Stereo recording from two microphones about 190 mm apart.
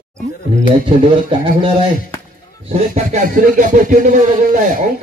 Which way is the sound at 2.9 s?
40° right (ahead or behind).